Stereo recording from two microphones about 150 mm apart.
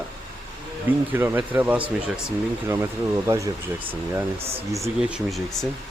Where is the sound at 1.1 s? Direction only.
15° right (ahead or behind).